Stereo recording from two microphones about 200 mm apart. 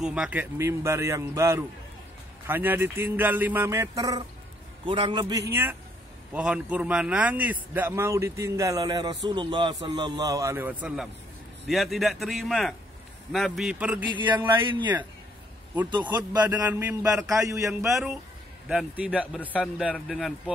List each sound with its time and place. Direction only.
0.0 s a man's voice: 5° right (ahead or behind)
14.1 s a man's voice: 25° right (ahead or behind)
15.9 s a man's voice: 20° right (ahead or behind); by 20.5 s centre (ahead or behind)